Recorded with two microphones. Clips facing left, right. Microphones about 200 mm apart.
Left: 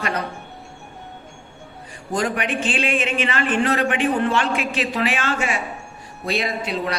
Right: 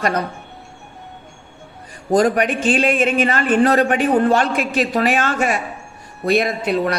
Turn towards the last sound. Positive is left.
turn(degrees=-50)  # may be behind; listen again after turning